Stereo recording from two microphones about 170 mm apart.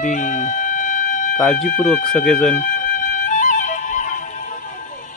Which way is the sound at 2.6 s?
50° left (ahead or behind).